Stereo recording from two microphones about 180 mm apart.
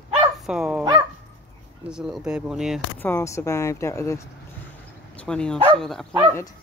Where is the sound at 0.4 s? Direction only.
5° right (ahead or behind).